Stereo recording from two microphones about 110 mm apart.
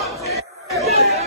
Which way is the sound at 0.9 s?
75° right (ahead or behind).